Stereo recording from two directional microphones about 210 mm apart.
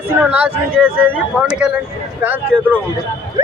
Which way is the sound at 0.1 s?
10° right (ahead or behind).